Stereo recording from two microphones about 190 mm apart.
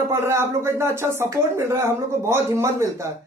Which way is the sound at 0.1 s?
15° right (ahead or behind).